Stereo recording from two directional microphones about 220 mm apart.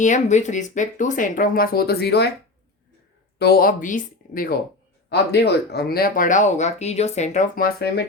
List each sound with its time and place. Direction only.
0.0 s speech: 35° left (ahead or behind); by 2.3 s 50° left (ahead or behind)
3.3 s a woman's voice: 45° left (ahead or behind)
5.0 s speech: 50° left (ahead or behind)